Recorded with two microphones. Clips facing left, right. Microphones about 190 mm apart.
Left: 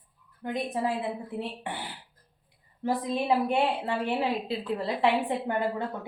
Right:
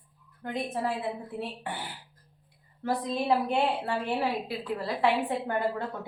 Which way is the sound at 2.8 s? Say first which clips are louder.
Left 1 dB; 15° left (ahead or behind).